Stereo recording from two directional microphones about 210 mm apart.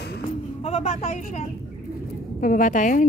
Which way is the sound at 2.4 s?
40° left (ahead or behind).